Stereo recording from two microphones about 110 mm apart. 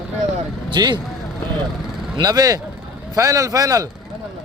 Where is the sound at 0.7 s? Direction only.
45° right (ahead or behind).